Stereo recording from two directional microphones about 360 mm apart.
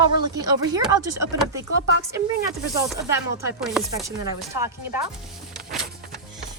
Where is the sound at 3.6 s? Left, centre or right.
Centre.